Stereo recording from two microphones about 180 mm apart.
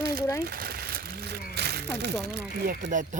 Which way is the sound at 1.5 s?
65° right (ahead or behind).